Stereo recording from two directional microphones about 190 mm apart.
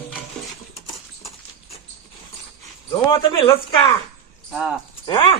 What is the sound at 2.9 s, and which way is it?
Speech, 25° left (ahead or behind).